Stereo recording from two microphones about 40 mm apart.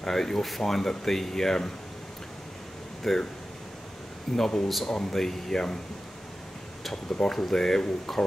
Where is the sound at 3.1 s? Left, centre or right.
Centre.